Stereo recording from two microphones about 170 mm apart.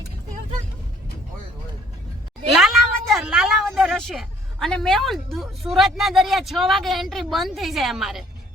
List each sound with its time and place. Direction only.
2.5 s cat: centre (ahead or behind)
3.8 s speech: centre (ahead or behind)